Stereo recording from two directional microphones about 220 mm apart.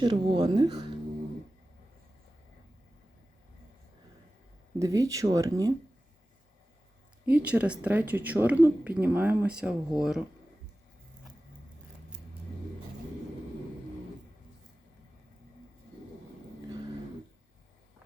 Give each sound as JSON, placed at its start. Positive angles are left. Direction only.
{"t": 0.0, "sound": "speech", "side_deg": -20}
{"t": 4.8, "sound": "a woman's voice", "side_deg": -15}
{"t": 7.3, "sound": "a woman's voice", "side_deg": -5}